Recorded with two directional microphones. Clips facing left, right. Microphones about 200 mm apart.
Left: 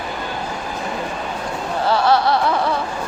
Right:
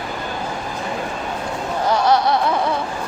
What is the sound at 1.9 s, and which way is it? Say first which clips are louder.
Music: even; 20° right (ahead or behind).